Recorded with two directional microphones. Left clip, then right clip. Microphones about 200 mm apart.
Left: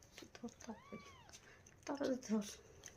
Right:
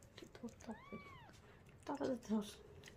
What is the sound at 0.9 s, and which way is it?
Cat, 5° left (ahead or behind).